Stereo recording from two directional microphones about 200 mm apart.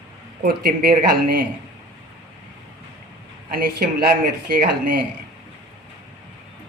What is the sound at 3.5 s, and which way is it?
Speech, 50° right (ahead or behind).